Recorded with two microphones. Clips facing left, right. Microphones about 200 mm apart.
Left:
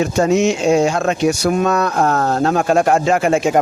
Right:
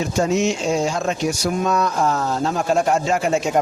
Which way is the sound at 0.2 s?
60° left (ahead or behind).